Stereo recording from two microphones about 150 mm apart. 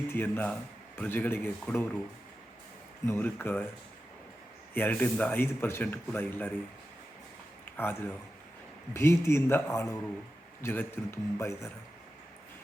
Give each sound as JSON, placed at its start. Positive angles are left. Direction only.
{"t": 0.1, "sound": "speech", "side_deg": 15}
{"t": 3.1, "sound": "speech", "side_deg": 15}
{"t": 4.7, "sound": "speech", "side_deg": 10}
{"t": 7.6, "sound": "a sound", "side_deg": 15}
{"t": 8.9, "sound": "speech", "side_deg": 20}